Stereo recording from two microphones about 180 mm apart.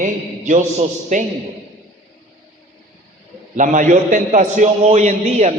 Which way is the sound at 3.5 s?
45° right (ahead or behind).